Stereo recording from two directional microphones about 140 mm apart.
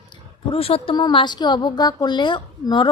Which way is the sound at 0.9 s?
30° left (ahead or behind).